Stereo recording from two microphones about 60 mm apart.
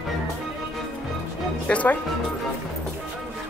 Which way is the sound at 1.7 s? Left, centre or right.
Left.